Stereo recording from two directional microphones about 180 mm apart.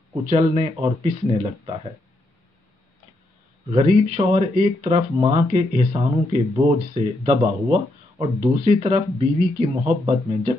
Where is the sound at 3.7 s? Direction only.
35° right (ahead or behind).